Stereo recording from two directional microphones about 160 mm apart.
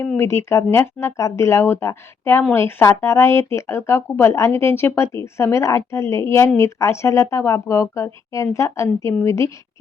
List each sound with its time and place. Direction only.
0.2 s speech: 15° left (ahead or behind)